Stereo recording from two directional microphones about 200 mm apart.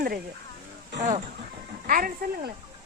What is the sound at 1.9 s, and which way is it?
Speech, 45° right (ahead or behind).